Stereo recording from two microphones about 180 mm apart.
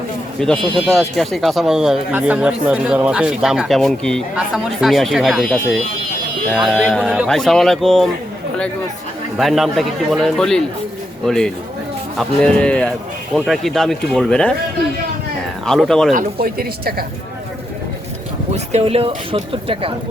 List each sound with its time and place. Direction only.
0.3 s speech: 5° left (ahead or behind)
9.4 s speech: centre (ahead or behind)
15.6 s speech: 5° left (ahead or behind)
16.1 s speech: 55° right (ahead or behind)
18.5 s speech: 35° right (ahead or behind)